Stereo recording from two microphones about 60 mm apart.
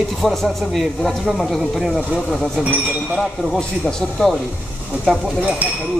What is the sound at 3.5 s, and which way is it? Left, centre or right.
Speech, centre.